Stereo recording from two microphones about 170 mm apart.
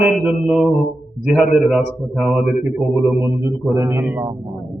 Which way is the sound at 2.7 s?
20° right (ahead or behind).